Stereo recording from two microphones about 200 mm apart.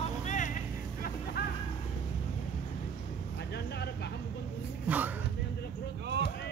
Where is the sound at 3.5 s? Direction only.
55° left (ahead or behind).